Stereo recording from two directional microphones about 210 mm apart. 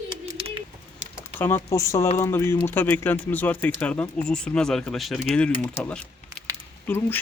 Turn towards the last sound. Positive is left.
turn(degrees=10)  # may be behind; listen again after turning